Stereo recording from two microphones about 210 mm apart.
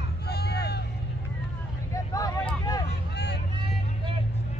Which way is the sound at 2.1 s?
15° left (ahead or behind).